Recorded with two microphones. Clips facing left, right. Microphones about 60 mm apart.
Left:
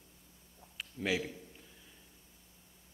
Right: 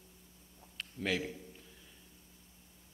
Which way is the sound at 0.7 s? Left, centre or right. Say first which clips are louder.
Left 1 dB; centre.